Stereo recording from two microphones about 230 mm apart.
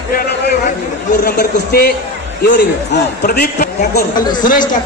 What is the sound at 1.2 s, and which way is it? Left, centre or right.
A man's voice, left.